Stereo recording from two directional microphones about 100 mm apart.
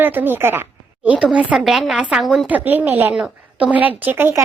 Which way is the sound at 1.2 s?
10° right (ahead or behind).